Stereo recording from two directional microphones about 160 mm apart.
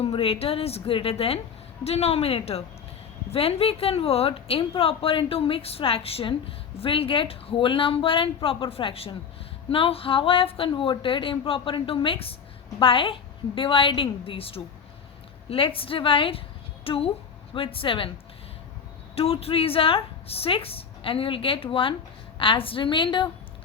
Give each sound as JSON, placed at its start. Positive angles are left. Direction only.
{"t": 0.0, "sound": "a woman's voice", "side_deg": 35}
{"t": 19.1, "sound": "a woman's voice", "side_deg": 35}